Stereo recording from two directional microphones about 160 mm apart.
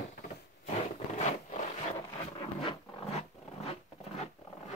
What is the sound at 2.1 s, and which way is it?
Zipper, 35° left (ahead or behind).